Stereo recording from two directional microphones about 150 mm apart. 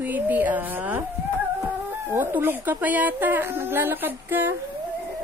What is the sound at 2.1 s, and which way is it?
Speech, 15° right (ahead or behind).